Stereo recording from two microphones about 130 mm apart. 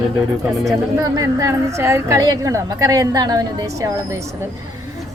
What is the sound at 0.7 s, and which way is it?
Speech, 30° right (ahead or behind).